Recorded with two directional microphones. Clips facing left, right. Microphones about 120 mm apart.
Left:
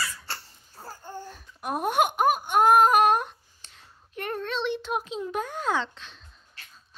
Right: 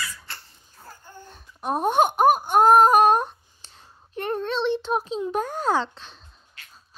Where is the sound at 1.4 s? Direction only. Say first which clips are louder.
Right 5 dB; 30° right (ahead or behind).